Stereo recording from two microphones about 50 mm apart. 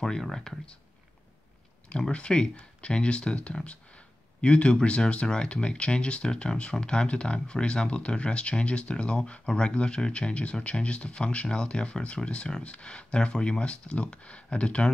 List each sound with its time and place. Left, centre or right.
0.2 s speech: centre
1.9 s speech: centre